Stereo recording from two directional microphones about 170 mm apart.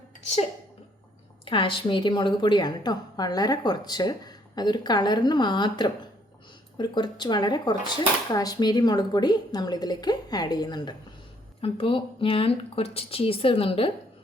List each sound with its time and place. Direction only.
1.5 s a woman's voice: 30° left (ahead or behind)